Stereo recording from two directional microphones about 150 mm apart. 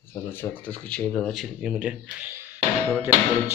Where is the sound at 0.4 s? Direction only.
10° left (ahead or behind); by 2.3 s 5° right (ahead or behind).